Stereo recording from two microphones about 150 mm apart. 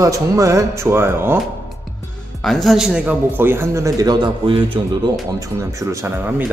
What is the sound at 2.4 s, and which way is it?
A man's voice, centre (ahead or behind).